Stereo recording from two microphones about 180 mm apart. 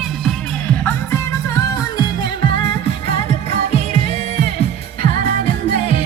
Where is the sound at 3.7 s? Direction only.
35° left (ahead or behind).